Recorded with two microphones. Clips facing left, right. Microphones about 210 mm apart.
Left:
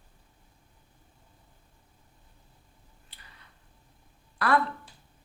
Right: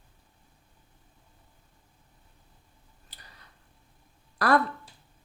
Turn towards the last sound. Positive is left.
turn(degrees=-40)  # may be behind; listen again after turning